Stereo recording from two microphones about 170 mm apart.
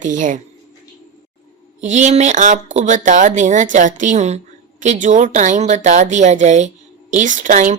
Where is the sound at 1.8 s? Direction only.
45° right (ahead or behind).